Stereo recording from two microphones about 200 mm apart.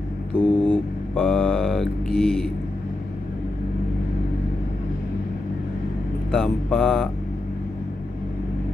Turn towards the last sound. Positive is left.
turn(degrees=5)  # may be behind; listen again after turning